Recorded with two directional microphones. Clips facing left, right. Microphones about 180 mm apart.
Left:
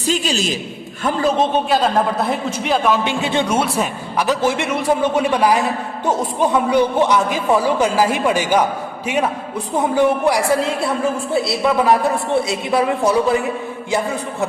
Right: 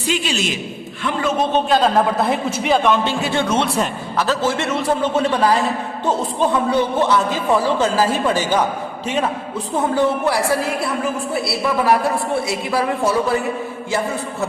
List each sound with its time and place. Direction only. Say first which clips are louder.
0.0 s a man's voice: left 2 dB; 40° left (ahead or behind)
1.7 s a woman's voice: right 1 dB; centre (ahead or behind)
3.0 s a man's voice: left 1 dB; 20° left (ahead or behind)
9.7 s a man's voice: left 2 dB; 15° left (ahead or behind)